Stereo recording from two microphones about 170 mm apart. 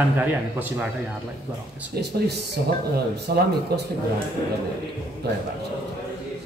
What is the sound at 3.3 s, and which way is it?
Speech, 65° right (ahead or behind).